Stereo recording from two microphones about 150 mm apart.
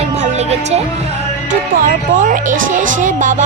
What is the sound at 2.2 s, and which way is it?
Music, 60° right (ahead or behind).